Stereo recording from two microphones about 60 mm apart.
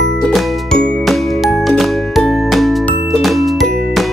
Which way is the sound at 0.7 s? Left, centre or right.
Centre.